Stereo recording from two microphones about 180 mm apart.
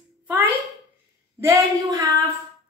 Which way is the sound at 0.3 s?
10° right (ahead or behind).